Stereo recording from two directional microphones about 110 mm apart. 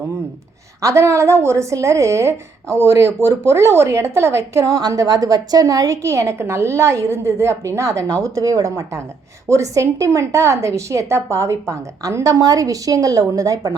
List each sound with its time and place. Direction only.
0.8 s a woman's voice: 25° right (ahead or behind)